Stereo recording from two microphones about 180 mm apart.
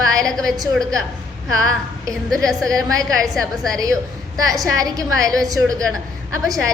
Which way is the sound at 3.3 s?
Centre (ahead or behind).